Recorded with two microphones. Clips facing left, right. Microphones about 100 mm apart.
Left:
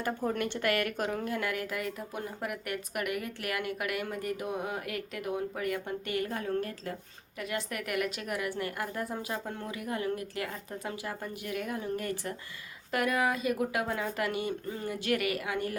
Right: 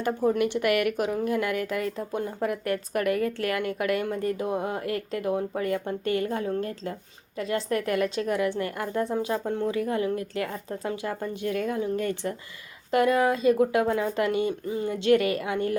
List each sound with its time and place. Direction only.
0.0 s a woman's voice: 15° right (ahead or behind)